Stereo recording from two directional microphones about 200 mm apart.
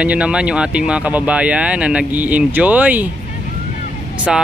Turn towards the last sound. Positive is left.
turn(degrees=-5)  # may be behind; listen again after turning